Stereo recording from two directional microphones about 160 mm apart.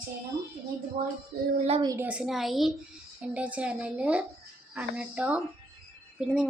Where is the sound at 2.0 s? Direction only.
5° right (ahead or behind).